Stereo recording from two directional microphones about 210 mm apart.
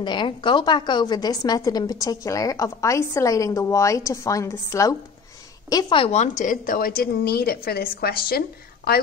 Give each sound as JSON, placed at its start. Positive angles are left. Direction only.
{"t": 0.0, "sound": "a woman's voice", "side_deg": 20}